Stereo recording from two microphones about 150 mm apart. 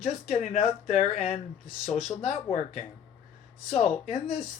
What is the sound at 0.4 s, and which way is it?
Speech, 50° left (ahead or behind).